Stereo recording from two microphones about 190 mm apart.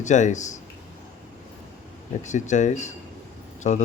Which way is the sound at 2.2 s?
40° left (ahead or behind).